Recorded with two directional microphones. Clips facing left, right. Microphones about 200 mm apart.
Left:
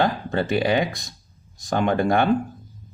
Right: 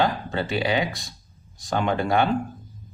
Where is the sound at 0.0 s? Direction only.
50° left (ahead or behind).